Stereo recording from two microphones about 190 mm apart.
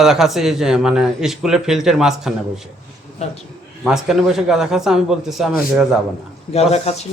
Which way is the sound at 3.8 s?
5° right (ahead or behind).